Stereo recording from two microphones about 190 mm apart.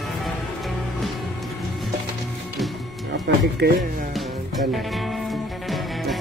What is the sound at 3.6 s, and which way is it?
Speech, 60° right (ahead or behind).